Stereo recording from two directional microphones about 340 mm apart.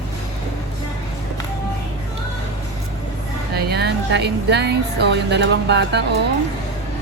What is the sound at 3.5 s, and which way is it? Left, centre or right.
A woman's voice, right.